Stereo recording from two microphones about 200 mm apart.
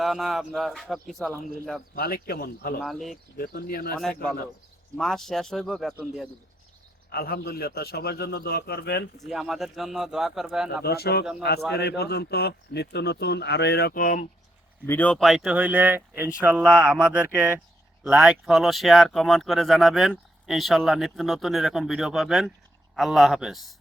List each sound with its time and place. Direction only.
0.0 s speech: centre (ahead or behind)
2.0 s a man's voice: 50° left (ahead or behind)
2.8 s speech: centre (ahead or behind)
3.3 s a man's voice: 50° left (ahead or behind)
4.9 s speech: centre (ahead or behind)
7.1 s a man's voice: 50° left (ahead or behind)
9.2 s speech: centre (ahead or behind)
10.8 s a man's voice: 50° left (ahead or behind)
14.8 s speech: 5° left (ahead or behind)